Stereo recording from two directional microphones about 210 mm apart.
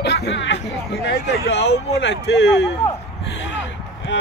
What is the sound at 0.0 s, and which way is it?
Speech, 55° left (ahead or behind).